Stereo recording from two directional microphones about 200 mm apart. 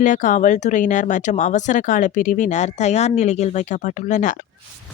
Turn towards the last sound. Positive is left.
turn(degrees=40)  # may be behind; listen again after turning